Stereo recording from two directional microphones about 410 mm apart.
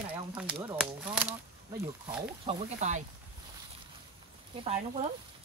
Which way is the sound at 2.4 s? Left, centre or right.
Centre.